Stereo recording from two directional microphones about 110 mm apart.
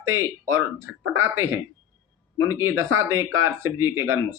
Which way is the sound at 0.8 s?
25° right (ahead or behind).